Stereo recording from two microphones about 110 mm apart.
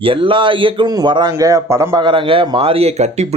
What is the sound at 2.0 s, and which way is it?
Speech, 50° right (ahead or behind).